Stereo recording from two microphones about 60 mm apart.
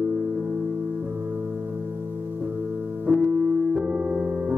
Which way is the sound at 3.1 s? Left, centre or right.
Right.